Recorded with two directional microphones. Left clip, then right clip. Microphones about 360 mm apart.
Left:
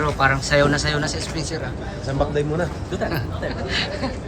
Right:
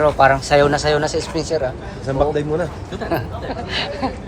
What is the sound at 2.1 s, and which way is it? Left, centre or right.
Speech, centre.